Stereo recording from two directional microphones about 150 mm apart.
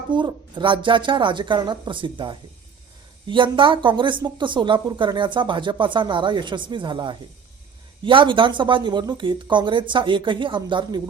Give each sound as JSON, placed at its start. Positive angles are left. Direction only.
{"t": 0.1, "sound": "speech", "side_deg": -30}